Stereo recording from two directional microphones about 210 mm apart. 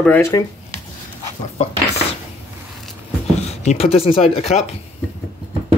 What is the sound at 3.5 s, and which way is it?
Speech, 30° left (ahead or behind).